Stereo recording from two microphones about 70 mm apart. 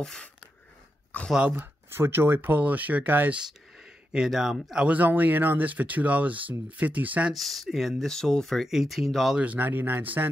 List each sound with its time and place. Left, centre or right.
1.5 s speech: right
4.3 s speech: centre
4.8 s speech: right
7.3 s speech: centre
8.1 s speech: centre
9.4 s speech: right